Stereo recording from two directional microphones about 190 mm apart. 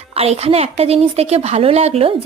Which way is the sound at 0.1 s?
30° right (ahead or behind).